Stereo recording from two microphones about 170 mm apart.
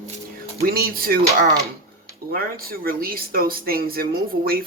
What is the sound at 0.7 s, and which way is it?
Speech, 60° right (ahead or behind).